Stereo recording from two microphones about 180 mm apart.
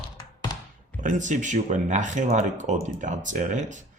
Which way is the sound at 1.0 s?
45° right (ahead or behind).